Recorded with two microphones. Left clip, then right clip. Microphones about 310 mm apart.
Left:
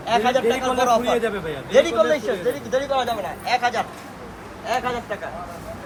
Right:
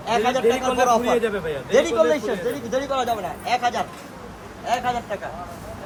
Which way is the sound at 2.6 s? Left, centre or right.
Right.